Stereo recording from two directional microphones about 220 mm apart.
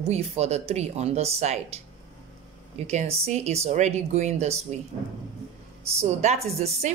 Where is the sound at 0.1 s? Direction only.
30° right (ahead or behind).